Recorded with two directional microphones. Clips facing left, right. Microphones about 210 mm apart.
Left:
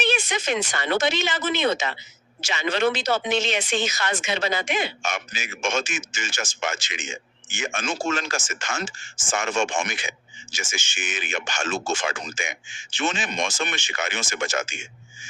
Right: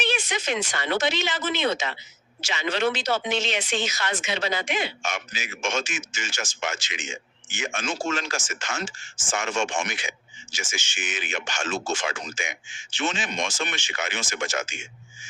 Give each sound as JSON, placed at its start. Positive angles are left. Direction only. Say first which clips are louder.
{"t": 0.0, "sound": "a woman's voice", "louder": "left 3 dB", "side_deg": 50}